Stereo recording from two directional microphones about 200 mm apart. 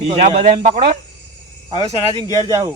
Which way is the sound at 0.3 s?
30° right (ahead or behind).